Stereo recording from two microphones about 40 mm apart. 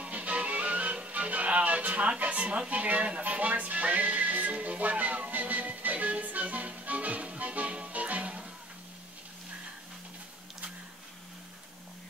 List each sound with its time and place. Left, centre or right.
0.0 s music: right